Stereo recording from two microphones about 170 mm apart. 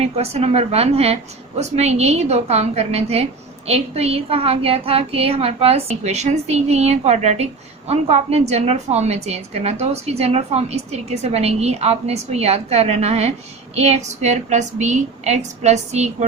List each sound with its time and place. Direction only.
0.0 s a woman's voice: 35° right (ahead or behind)